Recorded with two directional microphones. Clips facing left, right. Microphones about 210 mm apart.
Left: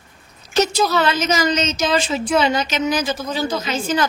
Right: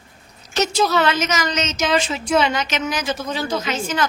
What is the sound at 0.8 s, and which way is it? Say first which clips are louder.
Speech: even; centre (ahead or behind).